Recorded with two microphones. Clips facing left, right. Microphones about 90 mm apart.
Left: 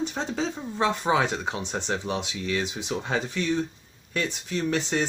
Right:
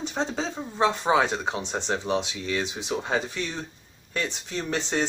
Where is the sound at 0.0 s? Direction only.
20° right (ahead or behind).